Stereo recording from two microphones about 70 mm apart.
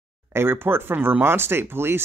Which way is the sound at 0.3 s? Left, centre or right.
Right.